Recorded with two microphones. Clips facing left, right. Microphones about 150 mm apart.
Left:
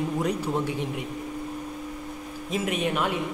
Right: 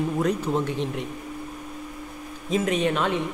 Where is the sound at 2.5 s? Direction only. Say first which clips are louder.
Right 4 dB; 5° left (ahead or behind).